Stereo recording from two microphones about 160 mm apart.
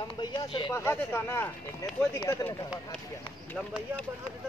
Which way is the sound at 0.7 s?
15° left (ahead or behind).